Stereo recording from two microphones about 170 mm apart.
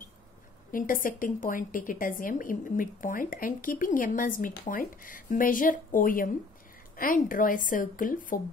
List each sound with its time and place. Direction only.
0.7 s speech: 55° left (ahead or behind)